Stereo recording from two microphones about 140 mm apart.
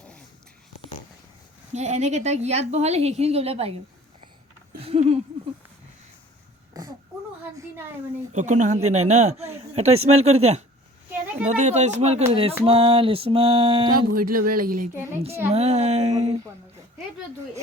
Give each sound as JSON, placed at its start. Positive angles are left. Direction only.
{"t": 1.7, "sound": "speech", "side_deg": -55}
{"t": 4.8, "sound": "a sound", "side_deg": -45}
{"t": 8.3, "sound": "speech", "side_deg": -60}
{"t": 12.6, "sound": "a sound", "side_deg": -45}
{"t": 14.2, "sound": "speech", "side_deg": -90}
{"t": 15.4, "sound": "speech", "side_deg": -50}